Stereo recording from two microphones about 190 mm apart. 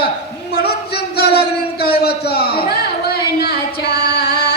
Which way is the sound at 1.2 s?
55° left (ahead or behind).